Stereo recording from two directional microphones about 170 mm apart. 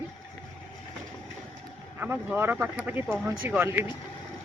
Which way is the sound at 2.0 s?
10° right (ahead or behind).